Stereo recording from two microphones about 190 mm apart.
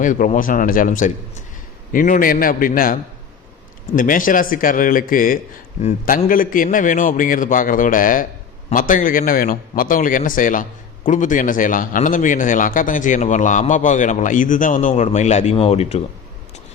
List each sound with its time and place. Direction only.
0.0 s a man's voice: 45° left (ahead or behind)